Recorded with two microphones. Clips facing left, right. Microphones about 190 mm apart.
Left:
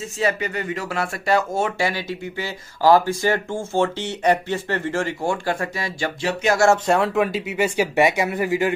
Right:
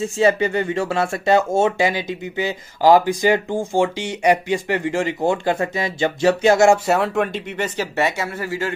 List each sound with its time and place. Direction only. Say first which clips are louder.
0.2 s speech: right 6 dB; 30° right (ahead or behind)
6.7 s speech: right 1 dB; 5° right (ahead or behind); by 8.7 s 15° left (ahead or behind)